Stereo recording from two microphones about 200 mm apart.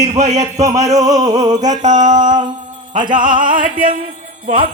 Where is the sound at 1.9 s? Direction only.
20° right (ahead or behind).